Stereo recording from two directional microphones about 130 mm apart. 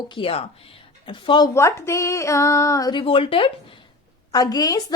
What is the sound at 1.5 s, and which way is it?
A woman's voice, 20° left (ahead or behind).